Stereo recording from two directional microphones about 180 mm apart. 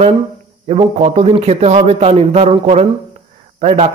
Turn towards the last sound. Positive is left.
turn(degrees=-35)  # may be behind; listen again after turning